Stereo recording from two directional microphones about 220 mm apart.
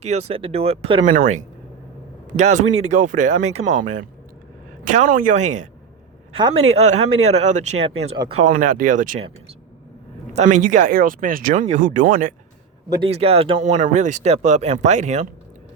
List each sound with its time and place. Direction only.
0.0 s speech: 30° right (ahead or behind)
10.3 s speech: 35° right (ahead or behind)
12.9 s speech: 25° right (ahead or behind)